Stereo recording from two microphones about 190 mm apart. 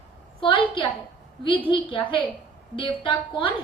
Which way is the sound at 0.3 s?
25° left (ahead or behind).